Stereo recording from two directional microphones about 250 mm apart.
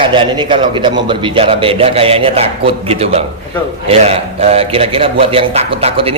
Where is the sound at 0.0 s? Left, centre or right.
Centre.